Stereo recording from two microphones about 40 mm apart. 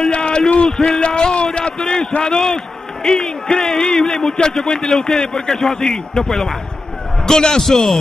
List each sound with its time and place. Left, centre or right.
0.1 s a sound: left
0.7 s a man's voice: centre
7.6 s speech: centre